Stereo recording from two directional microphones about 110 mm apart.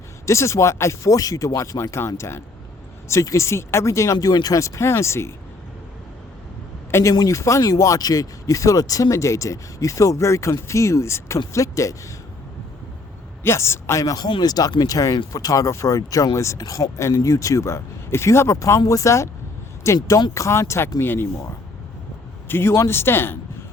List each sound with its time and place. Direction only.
0.3 s speech: 25° left (ahead or behind)
6.9 s speech: 30° left (ahead or behind)
13.4 s speech: 25° left (ahead or behind)
22.4 s a man's voice: 20° left (ahead or behind)